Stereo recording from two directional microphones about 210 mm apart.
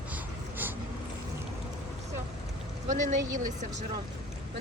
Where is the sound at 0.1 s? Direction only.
10° right (ahead or behind).